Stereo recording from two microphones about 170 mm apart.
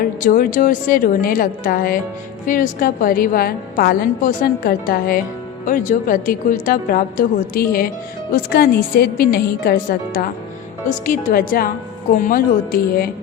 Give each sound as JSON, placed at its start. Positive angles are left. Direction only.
{"t": 0.0, "sound": "a woman's voice", "side_deg": 55}